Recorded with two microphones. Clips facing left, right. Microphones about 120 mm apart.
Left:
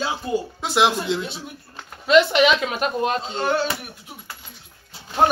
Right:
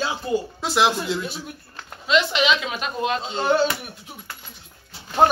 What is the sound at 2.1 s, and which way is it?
A woman's voice, 50° left (ahead or behind).